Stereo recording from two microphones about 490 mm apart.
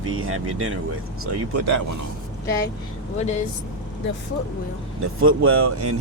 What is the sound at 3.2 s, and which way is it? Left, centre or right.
Speech, centre.